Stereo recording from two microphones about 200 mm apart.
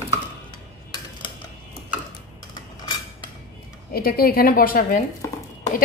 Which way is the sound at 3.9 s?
50° left (ahead or behind).